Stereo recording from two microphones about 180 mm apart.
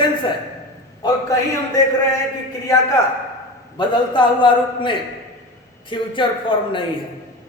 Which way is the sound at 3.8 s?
25° left (ahead or behind).